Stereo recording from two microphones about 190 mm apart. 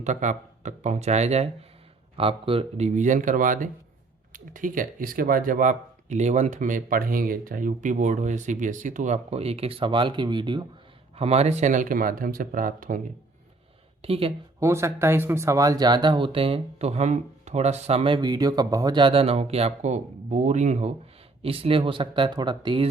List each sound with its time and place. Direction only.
0.0 s speech: 40° right (ahead or behind)
14.0 s speech: 30° right (ahead or behind)
14.6 s speech: 15° right (ahead or behind)